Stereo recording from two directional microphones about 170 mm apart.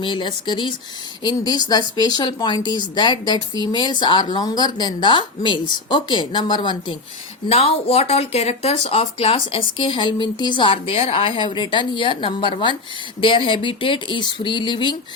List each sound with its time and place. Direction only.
0.0 s speech: 30° left (ahead or behind)